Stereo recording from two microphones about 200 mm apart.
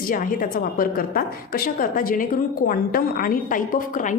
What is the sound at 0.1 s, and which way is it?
A woman's voice, 45° left (ahead or behind).